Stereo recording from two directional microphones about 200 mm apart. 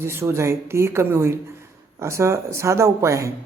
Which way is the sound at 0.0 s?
10° right (ahead or behind).